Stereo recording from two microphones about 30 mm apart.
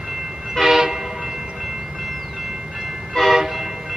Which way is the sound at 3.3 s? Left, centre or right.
Centre.